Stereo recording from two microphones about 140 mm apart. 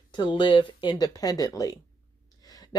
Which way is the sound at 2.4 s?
25° left (ahead or behind).